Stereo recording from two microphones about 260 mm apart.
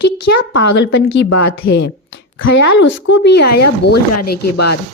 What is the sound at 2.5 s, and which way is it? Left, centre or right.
A woman's voice, left.